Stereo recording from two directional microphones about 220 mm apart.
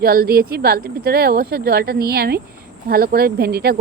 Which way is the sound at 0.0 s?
45° right (ahead or behind).